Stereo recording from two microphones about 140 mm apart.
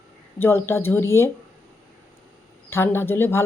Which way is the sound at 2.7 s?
15° left (ahead or behind).